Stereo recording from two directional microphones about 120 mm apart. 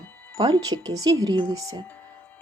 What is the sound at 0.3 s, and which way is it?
Speech, 40° right (ahead or behind).